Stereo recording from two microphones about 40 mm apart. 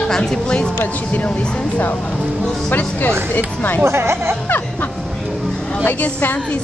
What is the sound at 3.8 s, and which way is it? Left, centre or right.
Speech, right.